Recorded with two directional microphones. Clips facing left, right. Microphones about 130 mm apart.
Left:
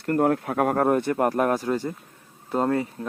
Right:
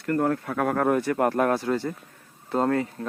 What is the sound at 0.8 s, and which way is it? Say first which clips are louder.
Speech: right 1 dB; 30° left (ahead or behind).